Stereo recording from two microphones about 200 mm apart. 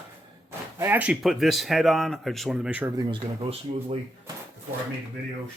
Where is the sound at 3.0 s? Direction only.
25° right (ahead or behind).